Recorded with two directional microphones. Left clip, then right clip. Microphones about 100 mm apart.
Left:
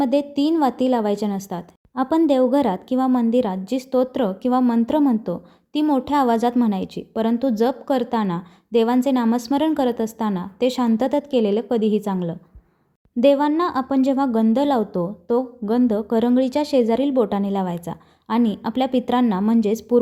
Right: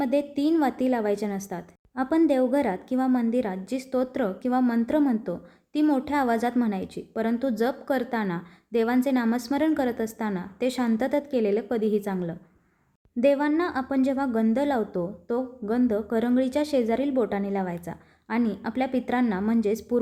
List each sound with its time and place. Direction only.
0.0 s a woman's voice: 40° left (ahead or behind)